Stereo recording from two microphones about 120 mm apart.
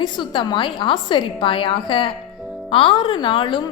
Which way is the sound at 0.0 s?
40° left (ahead or behind).